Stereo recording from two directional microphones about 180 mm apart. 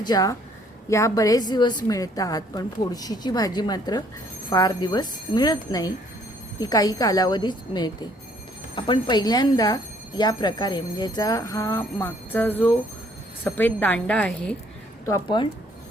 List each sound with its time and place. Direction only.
0.0 s a woman's voice: 20° left (ahead or behind)
15.3 s speech: 25° left (ahead or behind)